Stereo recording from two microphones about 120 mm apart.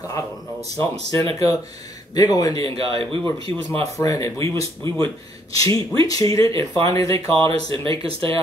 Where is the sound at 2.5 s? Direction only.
50° right (ahead or behind).